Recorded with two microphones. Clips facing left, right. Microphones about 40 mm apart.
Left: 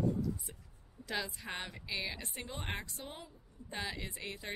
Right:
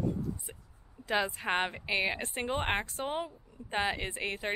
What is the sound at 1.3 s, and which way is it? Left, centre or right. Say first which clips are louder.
A woman's voice: right 11 dB; right.